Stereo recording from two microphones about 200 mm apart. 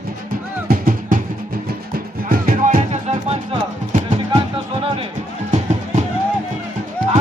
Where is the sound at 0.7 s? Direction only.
45° right (ahead or behind).